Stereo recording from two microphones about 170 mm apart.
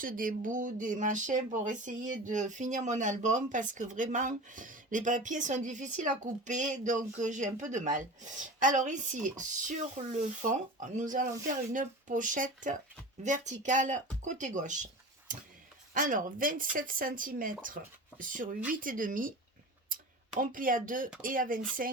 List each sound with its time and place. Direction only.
0.0 s speech: 55° right (ahead or behind)
16.0 s speech: 55° right (ahead or behind)
20.4 s speech: 55° right (ahead or behind)